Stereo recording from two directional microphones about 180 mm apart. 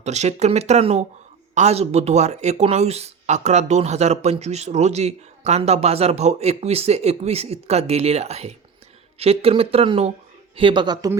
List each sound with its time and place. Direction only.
0.0 s speech: 40° right (ahead or behind); by 11.2 s 20° right (ahead or behind)